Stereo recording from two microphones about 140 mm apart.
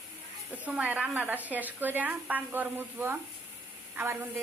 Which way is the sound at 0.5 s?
10° right (ahead or behind).